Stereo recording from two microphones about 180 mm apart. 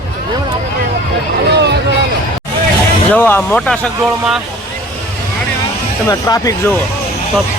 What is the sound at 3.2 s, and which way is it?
Speech, 10° left (ahead or behind).